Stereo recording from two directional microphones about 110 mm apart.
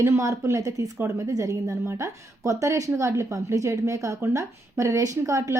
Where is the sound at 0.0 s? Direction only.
25° right (ahead or behind).